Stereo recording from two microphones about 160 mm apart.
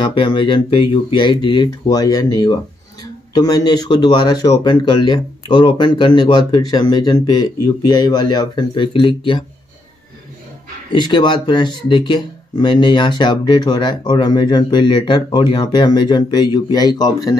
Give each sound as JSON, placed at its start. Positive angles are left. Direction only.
{"t": 0.0, "sound": "speech", "side_deg": 30}
{"t": 11.0, "sound": "speech", "side_deg": 30}